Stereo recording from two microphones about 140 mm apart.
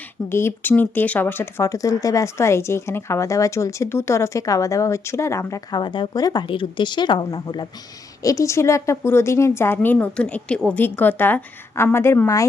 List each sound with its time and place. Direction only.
0.3 s a woman's voice: 20° left (ahead or behind)